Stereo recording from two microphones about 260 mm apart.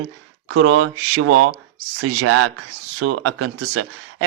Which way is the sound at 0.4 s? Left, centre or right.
Right.